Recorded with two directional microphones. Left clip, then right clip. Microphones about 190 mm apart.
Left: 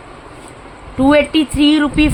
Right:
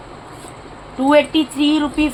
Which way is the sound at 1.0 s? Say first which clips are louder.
Left 2 dB; 40° left (ahead or behind).